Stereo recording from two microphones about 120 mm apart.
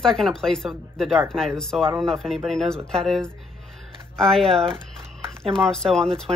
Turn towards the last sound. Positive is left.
turn(degrees=5)  # may be behind; listen again after turning